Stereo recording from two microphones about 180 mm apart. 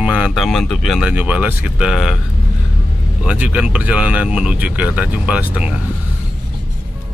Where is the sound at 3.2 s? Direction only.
5° right (ahead or behind).